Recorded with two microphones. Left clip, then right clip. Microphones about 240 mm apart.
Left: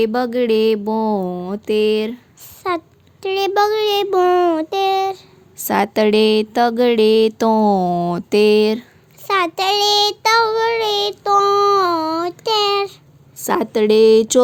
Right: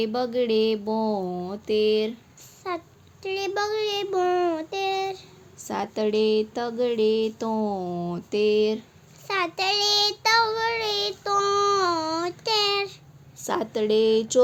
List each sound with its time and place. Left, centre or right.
0.0 s a child's voice: left
5.6 s a sound: left
9.2 s child singing: left
13.3 s a child's voice: left